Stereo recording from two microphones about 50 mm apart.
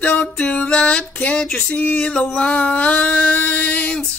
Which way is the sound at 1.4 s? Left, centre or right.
Centre.